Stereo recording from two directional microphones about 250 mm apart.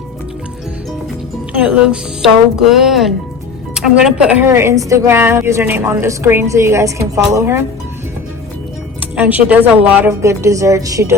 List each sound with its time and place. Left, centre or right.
1.5 s a woman's voice: centre
9.0 s a woman's voice: centre